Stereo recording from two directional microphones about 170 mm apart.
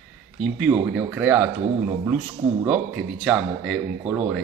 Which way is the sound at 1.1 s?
10° right (ahead or behind).